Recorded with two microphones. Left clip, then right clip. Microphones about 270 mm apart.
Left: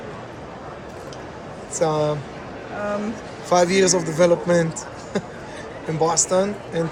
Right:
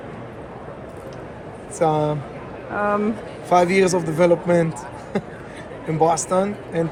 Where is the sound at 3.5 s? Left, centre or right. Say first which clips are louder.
Right 1 dB; right.